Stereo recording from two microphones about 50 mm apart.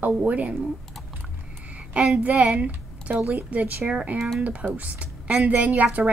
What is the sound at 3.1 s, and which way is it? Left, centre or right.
A woman's voice, right.